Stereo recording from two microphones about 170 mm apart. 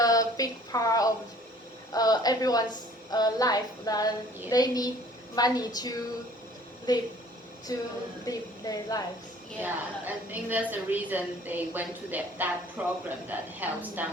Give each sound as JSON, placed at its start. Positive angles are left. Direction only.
{"t": 0.0, "sound": "a sound", "side_deg": 20}
{"t": 1.9, "sound": "a woman's voice", "side_deg": 20}
{"t": 9.6, "sound": "a woman's voice", "side_deg": -10}